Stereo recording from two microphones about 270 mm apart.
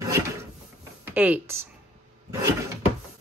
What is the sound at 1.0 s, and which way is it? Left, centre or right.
Speech, centre.